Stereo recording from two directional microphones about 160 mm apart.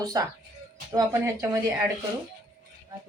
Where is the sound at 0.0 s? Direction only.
25° right (ahead or behind).